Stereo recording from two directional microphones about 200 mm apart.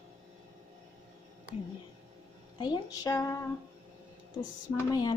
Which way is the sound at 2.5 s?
20° left (ahead or behind).